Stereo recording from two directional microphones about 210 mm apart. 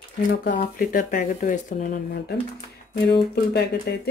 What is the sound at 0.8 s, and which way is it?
Speech, 40° left (ahead or behind).